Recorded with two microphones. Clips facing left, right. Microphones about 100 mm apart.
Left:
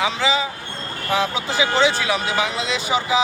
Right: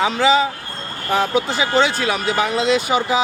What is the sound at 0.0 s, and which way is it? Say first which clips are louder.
Speech: right 5 dB; 40° right (ahead or behind).